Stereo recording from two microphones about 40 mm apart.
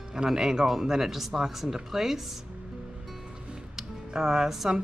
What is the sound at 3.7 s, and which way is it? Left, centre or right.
Speech, centre.